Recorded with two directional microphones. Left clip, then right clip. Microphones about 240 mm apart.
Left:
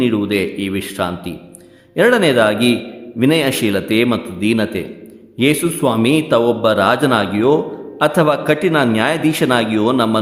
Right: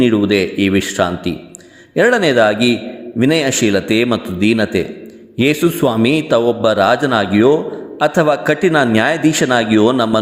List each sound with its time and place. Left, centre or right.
0.0 s a man's voice: centre